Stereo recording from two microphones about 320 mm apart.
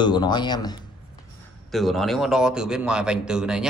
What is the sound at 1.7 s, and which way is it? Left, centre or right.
A man's voice, centre.